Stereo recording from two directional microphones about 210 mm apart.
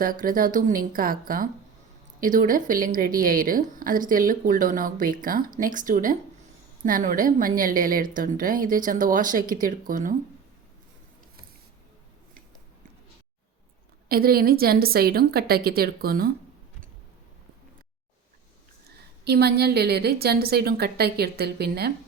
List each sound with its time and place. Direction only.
0.0 s a woman's voice: 40° right (ahead or behind)
14.1 s a woman's voice: 45° right (ahead or behind)
19.2 s a woman's voice: 50° right (ahead or behind)